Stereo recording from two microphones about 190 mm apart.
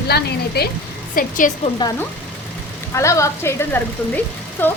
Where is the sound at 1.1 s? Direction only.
45° left (ahead or behind).